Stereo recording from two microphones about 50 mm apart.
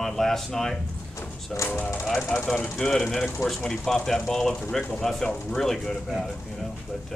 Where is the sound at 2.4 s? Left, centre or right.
Left.